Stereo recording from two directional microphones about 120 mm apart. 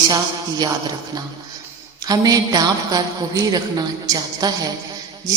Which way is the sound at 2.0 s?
30° right (ahead or behind).